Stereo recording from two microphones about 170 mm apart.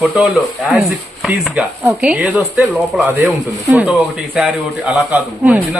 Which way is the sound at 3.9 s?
Centre (ahead or behind).